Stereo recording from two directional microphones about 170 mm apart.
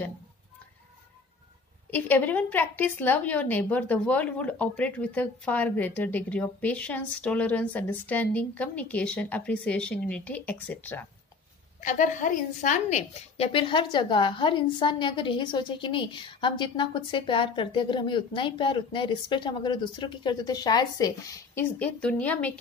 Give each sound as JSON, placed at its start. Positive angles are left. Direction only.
{"t": 1.9, "sound": "speech", "side_deg": 10}
{"t": 11.8, "sound": "a woman's voice", "side_deg": 45}